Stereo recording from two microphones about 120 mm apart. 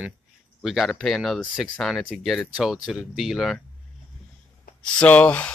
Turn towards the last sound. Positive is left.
turn(degrees=10)  # may be behind; listen again after turning